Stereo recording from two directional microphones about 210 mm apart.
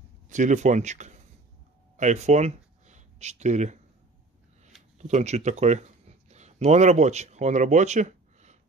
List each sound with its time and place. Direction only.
0.3 s speech: 35° right (ahead or behind)
2.0 s a sound: 35° right (ahead or behind)
4.9 s speech: 35° right (ahead or behind)